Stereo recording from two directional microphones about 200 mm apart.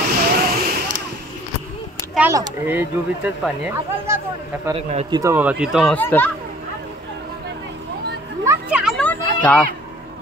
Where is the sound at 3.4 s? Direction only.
5° right (ahead or behind).